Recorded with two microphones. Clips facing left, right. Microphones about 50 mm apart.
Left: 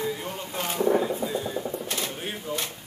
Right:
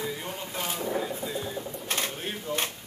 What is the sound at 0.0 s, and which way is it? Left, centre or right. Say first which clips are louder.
Vehicle: left 3 dB; centre.